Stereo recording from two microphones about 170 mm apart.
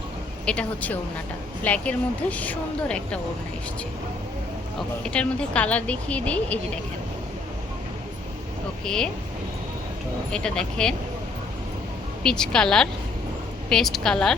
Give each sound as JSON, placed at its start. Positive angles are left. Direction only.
{"t": 0.4, "sound": "a woman's voice", "side_deg": 5}
{"t": 5.0, "sound": "a woman's voice", "side_deg": 5}
{"t": 8.8, "sound": "speech", "side_deg": 5}
{"t": 10.3, "sound": "a woman's voice", "side_deg": 5}
{"t": 12.2, "sound": "a woman's voice", "side_deg": 5}